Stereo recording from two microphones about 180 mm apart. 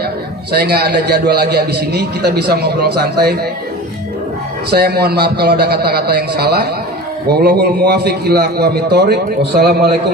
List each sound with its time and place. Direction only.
0.6 s a man's voice: 65° right (ahead or behind)
4.7 s a man's voice: 60° right (ahead or behind)